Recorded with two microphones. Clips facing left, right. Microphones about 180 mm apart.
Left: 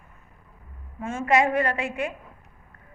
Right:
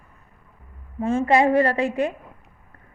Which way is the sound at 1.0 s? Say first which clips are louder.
Right 4 dB; 35° right (ahead or behind).